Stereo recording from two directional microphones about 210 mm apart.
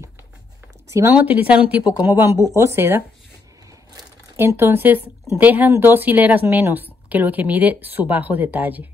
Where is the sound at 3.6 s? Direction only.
15° right (ahead or behind).